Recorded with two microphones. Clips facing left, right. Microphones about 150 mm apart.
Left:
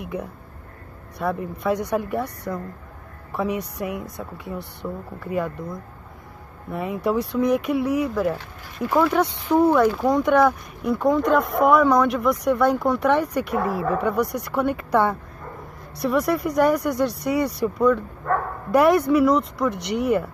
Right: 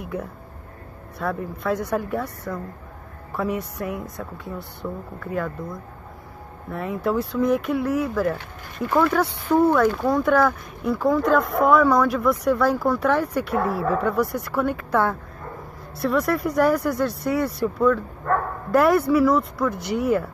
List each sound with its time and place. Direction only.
1.2 s a man's voice: centre (ahead or behind)
6.7 s speech: centre (ahead or behind)
19.7 s speech: 70° left (ahead or behind)